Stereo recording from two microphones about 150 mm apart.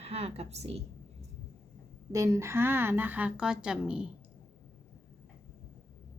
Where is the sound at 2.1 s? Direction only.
20° right (ahead or behind).